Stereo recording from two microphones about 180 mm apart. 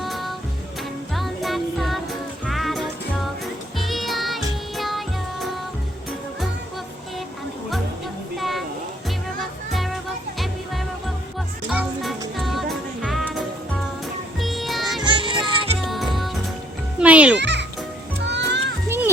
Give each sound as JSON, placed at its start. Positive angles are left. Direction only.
{"t": 0.0, "sound": "music", "side_deg": 0}
{"t": 8.4, "sound": "a sound", "side_deg": 0}
{"t": 9.7, "sound": "music", "side_deg": 0}
{"t": 15.0, "sound": "music", "side_deg": -25}
{"t": 15.9, "sound": "music", "side_deg": 0}
{"t": 17.3, "sound": "music", "side_deg": -75}
{"t": 18.9, "sound": "music", "side_deg": -10}